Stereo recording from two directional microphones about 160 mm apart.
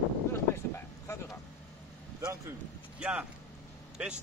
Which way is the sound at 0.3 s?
15° left (ahead or behind).